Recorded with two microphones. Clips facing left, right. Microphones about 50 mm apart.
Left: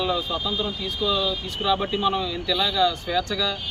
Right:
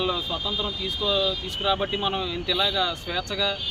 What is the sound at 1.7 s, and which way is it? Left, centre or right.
Speech, centre.